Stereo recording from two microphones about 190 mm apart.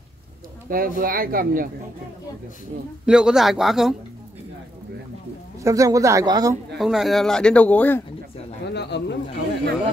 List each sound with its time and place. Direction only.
0.7 s speech: 45° right (ahead or behind)
3.1 s speech: 5° right (ahead or behind)
5.6 s speech: 15° right (ahead or behind)
6.8 s speech: centre (ahead or behind)
8.6 s speech: 65° left (ahead or behind)